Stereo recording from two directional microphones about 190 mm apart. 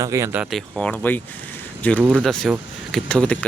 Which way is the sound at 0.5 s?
5° left (ahead or behind).